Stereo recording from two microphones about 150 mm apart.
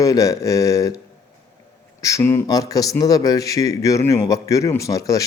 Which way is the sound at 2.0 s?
20° left (ahead or behind).